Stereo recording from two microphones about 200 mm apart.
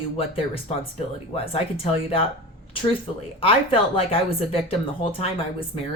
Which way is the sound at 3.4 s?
30° left (ahead or behind).